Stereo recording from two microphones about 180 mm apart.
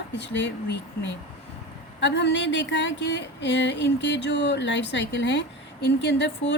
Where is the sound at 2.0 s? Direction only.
75° left (ahead or behind).